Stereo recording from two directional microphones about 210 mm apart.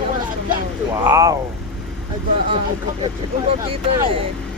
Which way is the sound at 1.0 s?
15° right (ahead or behind).